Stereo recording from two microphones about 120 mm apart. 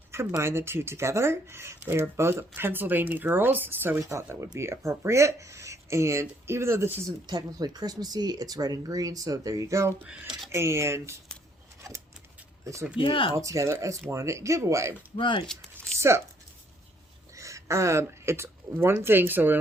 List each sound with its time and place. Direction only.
0.1 s speech: 25° right (ahead or behind)
7.3 s speech: 35° right (ahead or behind)
10.1 s speech: 5° right (ahead or behind)
10.5 s speech: 20° right (ahead or behind)
11.8 s a sound: 25° right (ahead or behind)
13.0 s speech: 45° left (ahead or behind)
13.3 s speech: 25° right (ahead or behind)
15.1 s speech: 40° left (ahead or behind)
15.8 s a sound: 25° right (ahead or behind)
17.3 s speech: 25° right (ahead or behind)